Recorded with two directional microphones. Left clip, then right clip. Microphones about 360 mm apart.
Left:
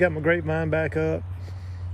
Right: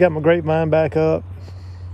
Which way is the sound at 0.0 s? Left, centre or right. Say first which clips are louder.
Right 7 dB; centre.